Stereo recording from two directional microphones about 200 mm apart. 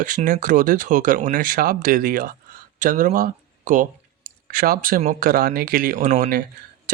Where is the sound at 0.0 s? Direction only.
40° right (ahead or behind).